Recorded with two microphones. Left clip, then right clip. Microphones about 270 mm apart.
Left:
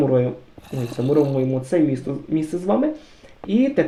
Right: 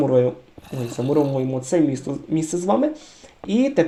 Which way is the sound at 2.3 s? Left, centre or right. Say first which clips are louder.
Right 1 dB; centre.